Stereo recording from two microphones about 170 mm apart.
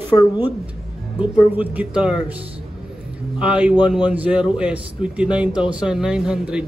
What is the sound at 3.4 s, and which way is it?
Speech, 5° right (ahead or behind).